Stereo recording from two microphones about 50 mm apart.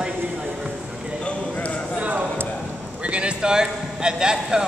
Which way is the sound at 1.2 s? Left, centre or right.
Left.